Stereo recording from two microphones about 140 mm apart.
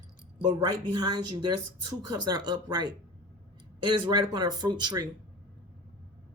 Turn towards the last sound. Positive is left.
turn(degrees=-30)  # may be behind; listen again after turning